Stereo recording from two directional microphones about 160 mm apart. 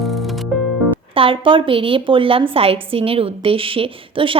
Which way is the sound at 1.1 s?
35° right (ahead or behind).